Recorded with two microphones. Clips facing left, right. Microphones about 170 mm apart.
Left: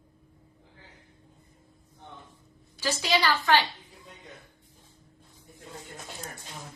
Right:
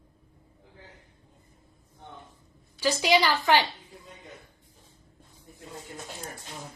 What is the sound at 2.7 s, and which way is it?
Speech, 15° right (ahead or behind).